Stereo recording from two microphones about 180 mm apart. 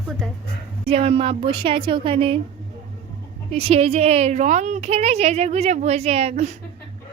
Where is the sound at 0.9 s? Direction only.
35° right (ahead or behind).